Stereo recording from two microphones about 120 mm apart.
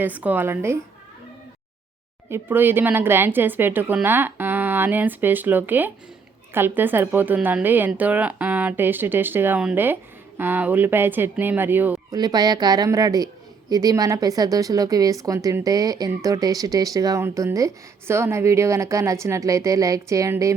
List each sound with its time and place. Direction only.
0.0 s a woman's voice: 15° right (ahead or behind)
2.3 s a woman's voice: 15° right (ahead or behind)
12.1 s a woman's voice: 35° right (ahead or behind)